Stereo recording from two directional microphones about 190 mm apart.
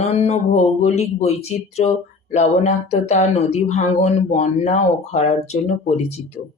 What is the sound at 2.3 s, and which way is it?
Speech, 35° left (ahead or behind).